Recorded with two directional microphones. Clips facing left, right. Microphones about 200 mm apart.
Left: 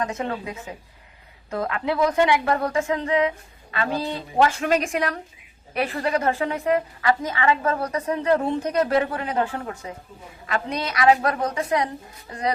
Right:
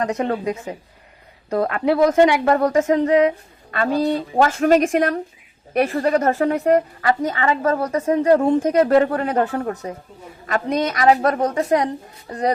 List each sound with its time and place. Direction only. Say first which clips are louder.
0.2 s a woman's voice: right 7 dB; 45° right (ahead or behind)